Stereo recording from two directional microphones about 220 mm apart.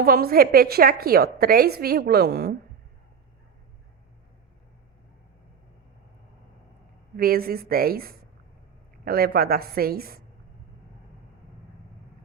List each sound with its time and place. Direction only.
0.0 s a woman's voice: 40° right (ahead or behind)
7.2 s a woman's voice: 45° right (ahead or behind)